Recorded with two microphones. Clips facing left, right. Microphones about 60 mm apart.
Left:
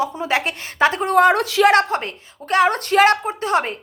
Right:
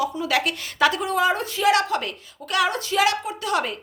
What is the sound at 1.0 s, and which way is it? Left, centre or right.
Speech, left.